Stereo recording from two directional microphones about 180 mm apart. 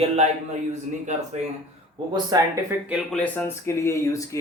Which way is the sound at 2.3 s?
20° right (ahead or behind).